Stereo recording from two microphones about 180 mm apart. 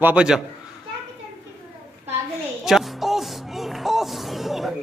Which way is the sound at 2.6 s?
Centre (ahead or behind).